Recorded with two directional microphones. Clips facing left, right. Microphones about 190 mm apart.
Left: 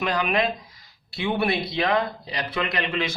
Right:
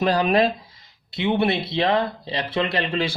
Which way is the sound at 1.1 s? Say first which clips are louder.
Right 3 dB; 20° right (ahead or behind).